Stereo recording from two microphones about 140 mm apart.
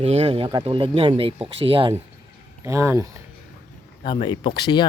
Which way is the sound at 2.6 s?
20° right (ahead or behind).